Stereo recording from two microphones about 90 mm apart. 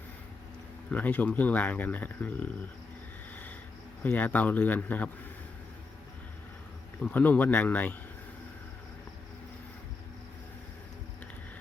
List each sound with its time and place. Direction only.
0.9 s speech: 20° left (ahead or behind)
4.0 s speech: 20° left (ahead or behind)
7.0 s speech: 20° left (ahead or behind)